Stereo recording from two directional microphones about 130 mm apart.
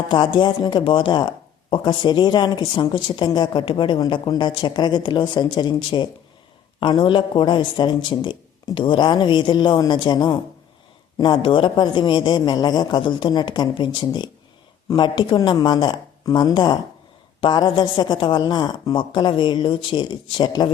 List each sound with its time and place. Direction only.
0.1 s a woman's voice: 35° left (ahead or behind)